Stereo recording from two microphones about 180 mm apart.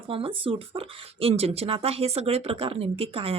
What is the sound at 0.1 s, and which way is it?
Speech, 30° right (ahead or behind).